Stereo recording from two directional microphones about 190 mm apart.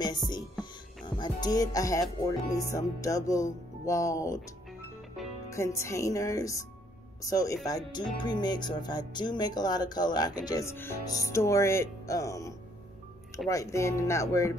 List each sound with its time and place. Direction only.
0.3 s music: 25° left (ahead or behind)
5.5 s music: 15° left (ahead or behind)
7.6 s speech: 20° left (ahead or behind)
13.5 s music: 15° left (ahead or behind)